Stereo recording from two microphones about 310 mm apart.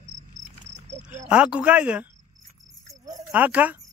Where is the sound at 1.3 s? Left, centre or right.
Centre.